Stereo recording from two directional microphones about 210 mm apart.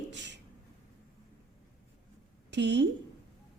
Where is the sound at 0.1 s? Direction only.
60° right (ahead or behind).